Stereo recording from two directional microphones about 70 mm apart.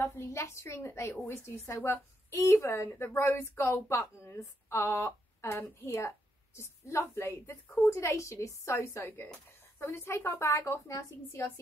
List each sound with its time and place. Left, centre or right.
0.0 s a woman's voice: left